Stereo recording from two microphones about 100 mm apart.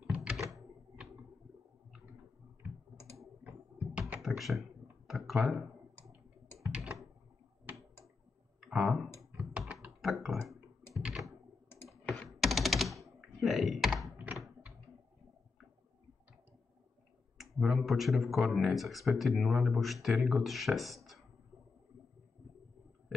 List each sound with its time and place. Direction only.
0.0 s typewriter: 10° right (ahead or behind)
3.2 s typing: 5° right (ahead or behind)
4.2 s speech: centre (ahead or behind)
6.7 s a sound: 5° right (ahead or behind)
8.5 s clicking: 5° right (ahead or behind)
9.7 s computer keyboard: 5° right (ahead or behind)
11.0 s a sound: 10° right (ahead or behind)
12.3 s computer keyboard: centre (ahead or behind)
14.1 s typing: 15° right (ahead or behind)
17.4 s speech: 5° right (ahead or behind)